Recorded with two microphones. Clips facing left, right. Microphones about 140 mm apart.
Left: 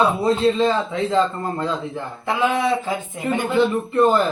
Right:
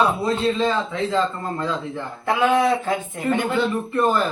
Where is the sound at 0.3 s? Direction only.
25° left (ahead or behind).